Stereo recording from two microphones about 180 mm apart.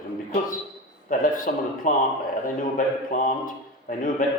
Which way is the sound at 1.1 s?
50° left (ahead or behind).